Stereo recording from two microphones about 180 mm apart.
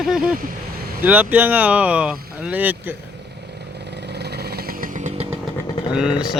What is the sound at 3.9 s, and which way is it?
Vehicle, 65° right (ahead or behind).